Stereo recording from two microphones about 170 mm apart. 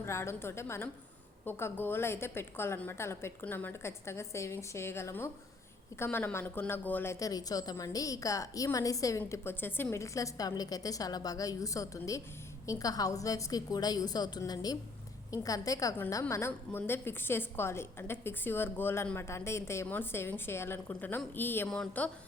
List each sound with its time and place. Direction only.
0.0 s a woman's voice: 15° left (ahead or behind)